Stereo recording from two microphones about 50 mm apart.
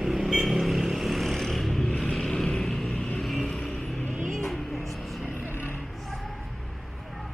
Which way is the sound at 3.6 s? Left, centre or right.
Centre.